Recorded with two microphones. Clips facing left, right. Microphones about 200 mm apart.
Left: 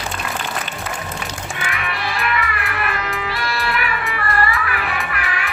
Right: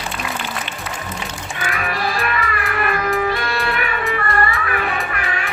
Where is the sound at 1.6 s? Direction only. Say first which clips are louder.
Right 4 dB; 35° right (ahead or behind).